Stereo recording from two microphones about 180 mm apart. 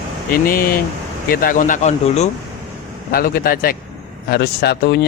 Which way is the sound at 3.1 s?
55° left (ahead or behind).